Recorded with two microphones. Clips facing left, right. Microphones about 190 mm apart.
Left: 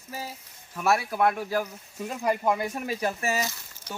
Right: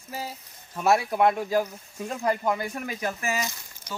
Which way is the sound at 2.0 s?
10° left (ahead or behind).